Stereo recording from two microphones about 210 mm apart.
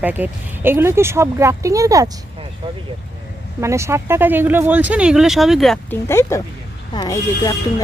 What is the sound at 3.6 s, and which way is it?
Speech, 15° right (ahead or behind).